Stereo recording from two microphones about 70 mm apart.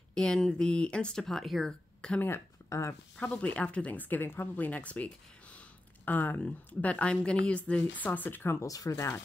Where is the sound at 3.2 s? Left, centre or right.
Centre.